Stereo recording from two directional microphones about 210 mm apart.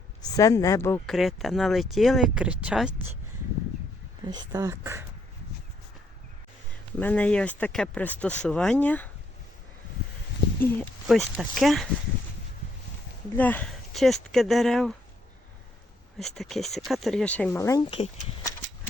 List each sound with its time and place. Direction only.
0.2 s speech: 15° left (ahead or behind)
1.1 s speech: centre (ahead or behind)
4.3 s speech: 20° right (ahead or behind)
6.9 s speech: 5° left (ahead or behind)
10.6 s speech: 5° left (ahead or behind)
13.3 s speech: 10° left (ahead or behind)
16.1 s speech: centre (ahead or behind)